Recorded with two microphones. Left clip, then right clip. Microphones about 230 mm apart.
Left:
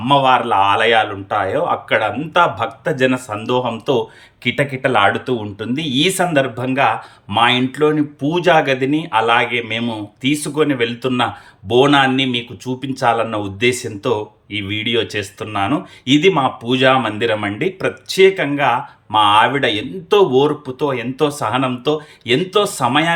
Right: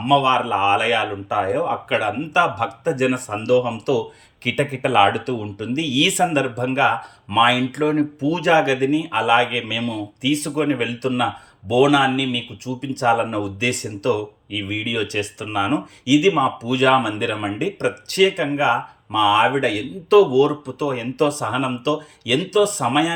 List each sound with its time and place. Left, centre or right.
0.0 s speech: centre